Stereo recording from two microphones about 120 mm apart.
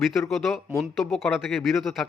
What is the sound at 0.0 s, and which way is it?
A man's voice, centre (ahead or behind).